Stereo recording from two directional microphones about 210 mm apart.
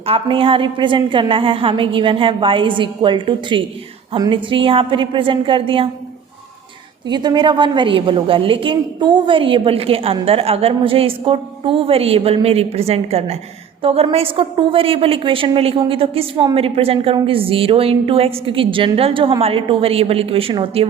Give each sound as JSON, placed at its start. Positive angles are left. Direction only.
{"t": 0.0, "sound": "a woman's voice", "side_deg": -25}
{"t": 7.1, "sound": "a woman's voice", "side_deg": -20}